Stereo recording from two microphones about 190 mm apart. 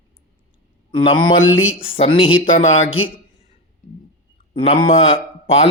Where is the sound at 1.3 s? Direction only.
90° left.